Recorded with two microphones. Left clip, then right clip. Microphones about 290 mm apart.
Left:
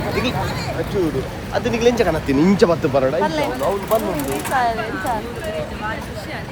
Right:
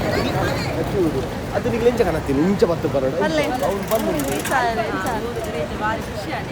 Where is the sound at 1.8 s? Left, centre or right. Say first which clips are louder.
Left 2 dB; left.